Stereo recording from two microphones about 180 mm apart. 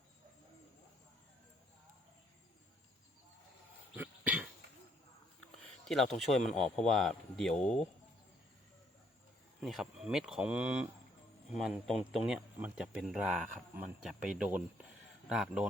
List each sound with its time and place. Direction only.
3.9 s cough: 10° right (ahead or behind)
5.9 s speech: centre (ahead or behind)
9.6 s speech: centre (ahead or behind)